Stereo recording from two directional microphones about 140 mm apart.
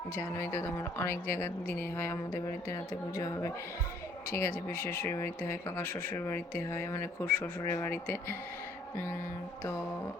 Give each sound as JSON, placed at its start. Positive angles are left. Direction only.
{"t": 0.2, "sound": "speech", "side_deg": 20}
{"t": 4.3, "sound": "speech", "side_deg": 20}